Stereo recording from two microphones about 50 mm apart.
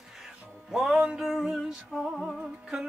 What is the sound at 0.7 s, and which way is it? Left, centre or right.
Music, centre.